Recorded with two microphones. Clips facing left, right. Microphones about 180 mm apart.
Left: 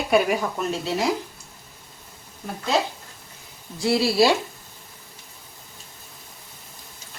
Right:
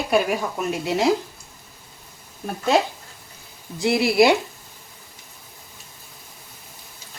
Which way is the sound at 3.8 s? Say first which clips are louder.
Right 2 dB; 20° right (ahead or behind).